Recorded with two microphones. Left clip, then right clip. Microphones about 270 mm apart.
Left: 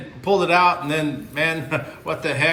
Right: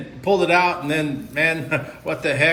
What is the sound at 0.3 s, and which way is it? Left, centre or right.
A man's voice, centre.